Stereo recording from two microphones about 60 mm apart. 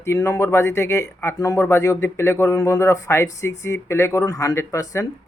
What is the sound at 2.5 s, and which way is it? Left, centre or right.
Speech, left.